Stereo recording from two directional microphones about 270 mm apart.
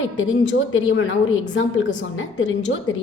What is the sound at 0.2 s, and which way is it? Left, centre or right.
Speech, left.